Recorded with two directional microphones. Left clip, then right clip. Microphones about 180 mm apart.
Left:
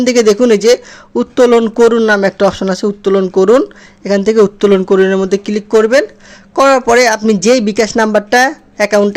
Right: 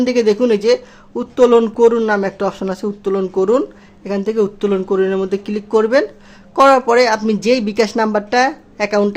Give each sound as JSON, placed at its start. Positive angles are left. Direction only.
{"t": 0.0, "sound": "speech", "side_deg": 25}